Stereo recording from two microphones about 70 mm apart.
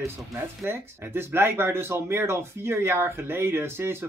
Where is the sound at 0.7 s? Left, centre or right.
Right.